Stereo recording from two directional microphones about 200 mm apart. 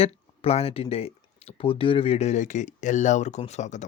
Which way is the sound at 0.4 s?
30° left (ahead or behind).